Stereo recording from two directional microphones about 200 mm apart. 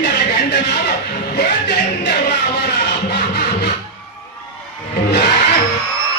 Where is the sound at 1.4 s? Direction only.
60° left (ahead or behind).